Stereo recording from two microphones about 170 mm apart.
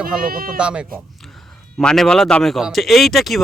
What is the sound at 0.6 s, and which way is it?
Speech, 5° right (ahead or behind).